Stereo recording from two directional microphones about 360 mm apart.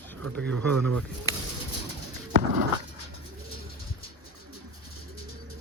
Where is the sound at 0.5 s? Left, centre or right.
Right.